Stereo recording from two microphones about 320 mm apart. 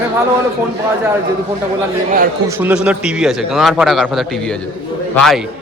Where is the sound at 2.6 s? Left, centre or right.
Centre.